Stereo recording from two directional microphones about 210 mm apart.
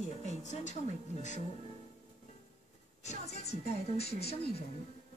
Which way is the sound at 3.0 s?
30° left (ahead or behind).